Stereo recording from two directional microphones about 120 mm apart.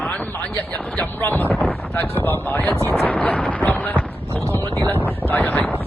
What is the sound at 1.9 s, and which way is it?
Speech, 15° left (ahead or behind).